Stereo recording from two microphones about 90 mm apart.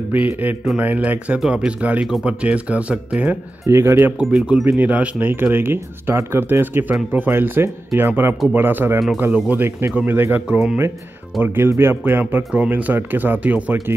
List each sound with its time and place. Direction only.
0.1 s speech: 20° right (ahead or behind)
3.6 s speech: 25° right (ahead or behind)
4.2 s speech: 10° right (ahead or behind)